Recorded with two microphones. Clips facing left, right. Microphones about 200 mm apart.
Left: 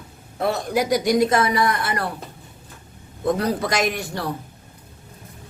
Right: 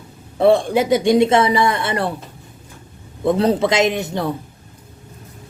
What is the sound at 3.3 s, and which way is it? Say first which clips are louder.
Speech: right 6 dB; 25° right (ahead or behind).